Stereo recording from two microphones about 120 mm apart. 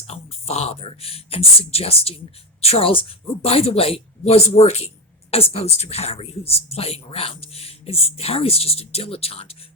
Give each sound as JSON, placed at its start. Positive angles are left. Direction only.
{"t": 0.1, "sound": "a woman's voice", "side_deg": 60}